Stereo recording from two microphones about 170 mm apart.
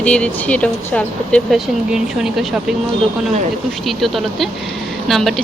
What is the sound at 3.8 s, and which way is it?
Speech, centre (ahead or behind).